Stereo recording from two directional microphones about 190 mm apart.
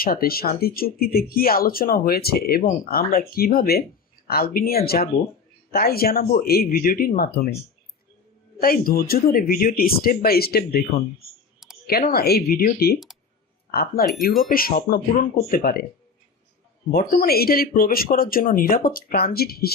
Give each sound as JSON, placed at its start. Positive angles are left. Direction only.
{"t": 0.0, "sound": "speech", "side_deg": 50}
{"t": 8.6, "sound": "speech", "side_deg": 50}
{"t": 16.9, "sound": "speech", "side_deg": 50}